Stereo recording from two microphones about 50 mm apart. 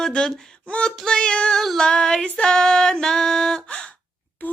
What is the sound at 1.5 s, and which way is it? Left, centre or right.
Female singing, centre.